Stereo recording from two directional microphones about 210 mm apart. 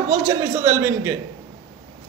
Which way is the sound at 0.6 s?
10° right (ahead or behind).